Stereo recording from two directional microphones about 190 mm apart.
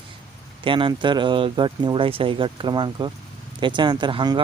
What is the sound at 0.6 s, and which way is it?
Speech, 25° right (ahead or behind).